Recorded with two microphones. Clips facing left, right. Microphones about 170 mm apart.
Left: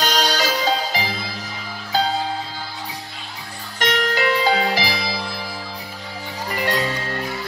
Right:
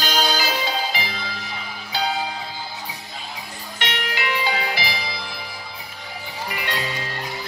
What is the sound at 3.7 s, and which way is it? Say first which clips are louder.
Music: left 7 dB; 40° left (ahead or behind).